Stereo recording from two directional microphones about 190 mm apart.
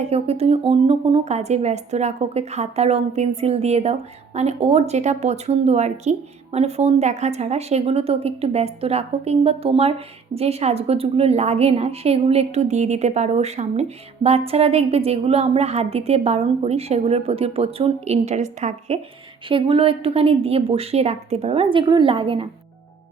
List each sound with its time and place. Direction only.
0.0 s a woman's voice: 30° right (ahead or behind)